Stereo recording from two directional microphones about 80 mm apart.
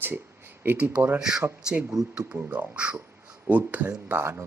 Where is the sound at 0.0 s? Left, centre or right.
Right.